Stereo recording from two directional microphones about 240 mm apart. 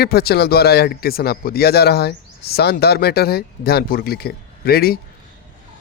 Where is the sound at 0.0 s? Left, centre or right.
Left.